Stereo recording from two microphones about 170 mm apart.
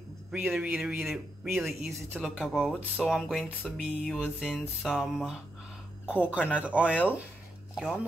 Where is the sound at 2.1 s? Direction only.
5° right (ahead or behind).